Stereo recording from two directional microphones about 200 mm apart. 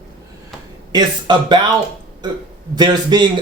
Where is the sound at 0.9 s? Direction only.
20° right (ahead or behind).